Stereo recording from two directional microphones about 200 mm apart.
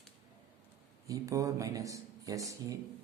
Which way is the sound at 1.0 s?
15° right (ahead or behind).